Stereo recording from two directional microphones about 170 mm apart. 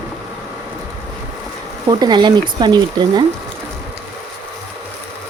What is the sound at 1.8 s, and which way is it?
Speech, 25° right (ahead or behind).